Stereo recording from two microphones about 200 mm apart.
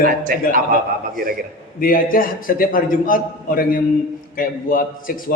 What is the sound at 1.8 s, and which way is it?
A man's voice, 45° left (ahead or behind).